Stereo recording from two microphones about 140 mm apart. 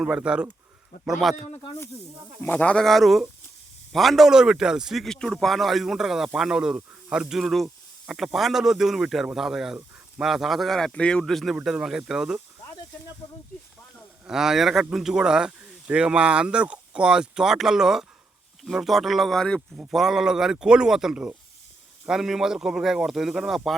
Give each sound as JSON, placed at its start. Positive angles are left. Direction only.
{"t": 0.0, "sound": "a man's voice", "side_deg": -5}
{"t": 2.4, "sound": "a man's voice", "side_deg": 10}
{"t": 13.2, "sound": "speech", "side_deg": 30}
{"t": 14.3, "sound": "a man's voice", "side_deg": -5}